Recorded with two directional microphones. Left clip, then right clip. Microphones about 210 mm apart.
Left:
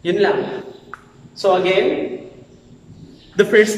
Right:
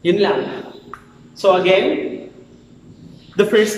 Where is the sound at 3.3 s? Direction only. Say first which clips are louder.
Left 1 dB; centre (ahead or behind).